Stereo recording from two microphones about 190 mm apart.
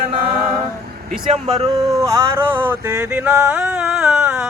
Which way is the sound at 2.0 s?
15° right (ahead or behind).